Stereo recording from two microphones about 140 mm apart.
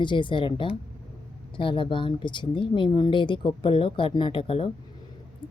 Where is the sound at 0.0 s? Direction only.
35° left (ahead or behind).